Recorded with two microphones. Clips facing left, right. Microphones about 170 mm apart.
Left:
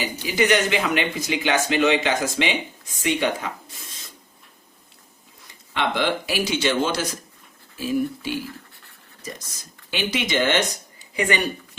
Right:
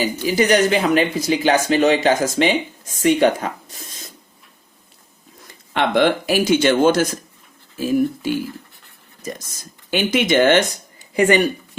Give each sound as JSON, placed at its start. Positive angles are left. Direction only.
{"t": 0.3, "sound": "speech", "side_deg": -40}
{"t": 5.7, "sound": "speech", "side_deg": -55}
{"t": 9.9, "sound": "speech", "side_deg": -50}